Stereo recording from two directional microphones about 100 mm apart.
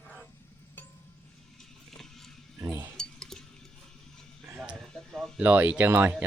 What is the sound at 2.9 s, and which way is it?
Stir, 5° left (ahead or behind).